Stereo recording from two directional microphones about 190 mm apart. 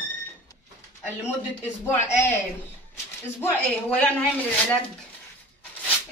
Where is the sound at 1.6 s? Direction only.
10° left (ahead or behind).